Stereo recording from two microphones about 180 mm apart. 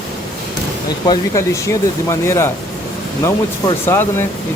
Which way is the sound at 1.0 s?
15° left (ahead or behind).